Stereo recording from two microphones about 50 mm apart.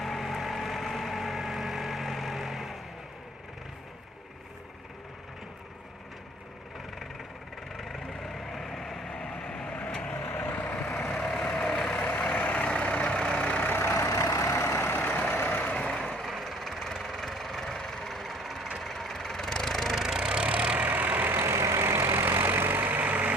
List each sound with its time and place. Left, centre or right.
0.0 s vehicle: centre
7.8 s vehicle: centre; by 10.0 s left
10.3 s vehicle: left
11.1 s vehicle: centre
12.0 s vehicle: left
14.1 s vehicle: left
14.8 s vehicle: left
16.0 s vehicle: centre
20.1 s vehicle: centre
20.7 s vehicle: right
21.3 s vehicle: right
22.4 s vehicle: right